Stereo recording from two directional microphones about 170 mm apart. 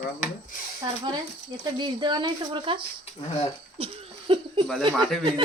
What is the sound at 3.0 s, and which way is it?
Speech, 40° left (ahead or behind).